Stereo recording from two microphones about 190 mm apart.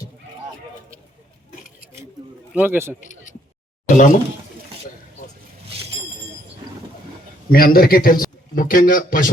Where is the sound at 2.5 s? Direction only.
10° right (ahead or behind).